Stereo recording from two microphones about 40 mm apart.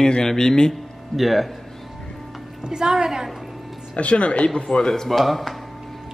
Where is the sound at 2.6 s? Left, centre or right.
Centre.